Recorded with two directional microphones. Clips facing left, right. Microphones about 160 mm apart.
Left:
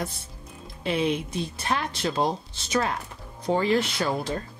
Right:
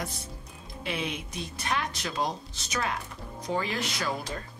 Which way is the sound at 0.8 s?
30° left (ahead or behind).